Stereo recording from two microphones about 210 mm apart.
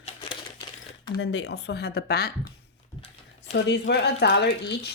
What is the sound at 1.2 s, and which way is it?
A woman's voice, 60° left (ahead or behind).